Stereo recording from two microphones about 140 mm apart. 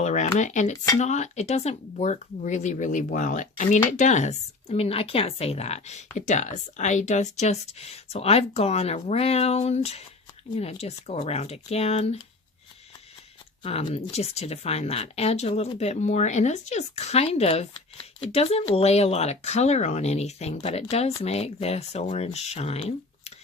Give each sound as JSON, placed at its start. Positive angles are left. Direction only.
{"t": 0.0, "sound": "a sound", "side_deg": 60}
{"t": 0.9, "sound": "speech", "side_deg": 55}
{"t": 6.1, "sound": "speech", "side_deg": 60}
{"t": 13.6, "sound": "speech", "side_deg": 40}